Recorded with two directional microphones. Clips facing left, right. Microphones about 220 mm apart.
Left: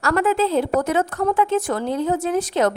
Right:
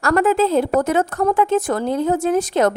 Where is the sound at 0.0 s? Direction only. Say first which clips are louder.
Right 3 dB; 45° right (ahead or behind).